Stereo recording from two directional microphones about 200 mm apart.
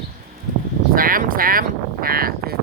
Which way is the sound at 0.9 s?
45° right (ahead or behind).